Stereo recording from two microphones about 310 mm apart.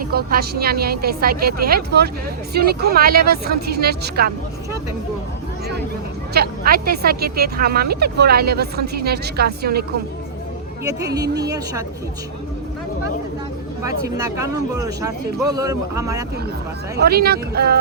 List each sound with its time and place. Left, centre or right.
0.1 s speech: right
6.3 s speech: right
11.0 s speech: centre
13.8 s speech: centre
17.0 s speech: right